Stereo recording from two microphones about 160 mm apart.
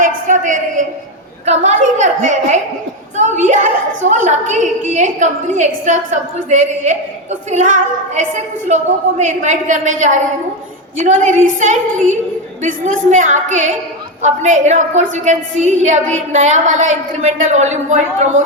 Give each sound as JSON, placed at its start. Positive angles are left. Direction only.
{"t": 0.0, "sound": "a woman's voice", "side_deg": -55}